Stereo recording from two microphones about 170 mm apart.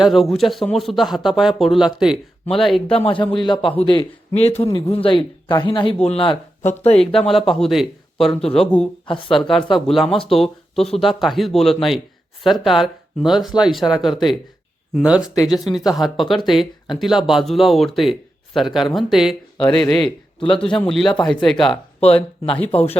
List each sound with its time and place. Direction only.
0.0 s speech: centre (ahead or behind)
2.9 s a man's voice: 35° left (ahead or behind)
7.0 s speech: 5° left (ahead or behind)
22.0 s a man's voice: 35° left (ahead or behind)